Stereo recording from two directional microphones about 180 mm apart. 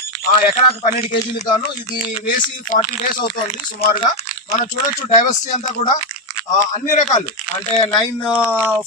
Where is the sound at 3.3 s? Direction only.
25° left (ahead or behind).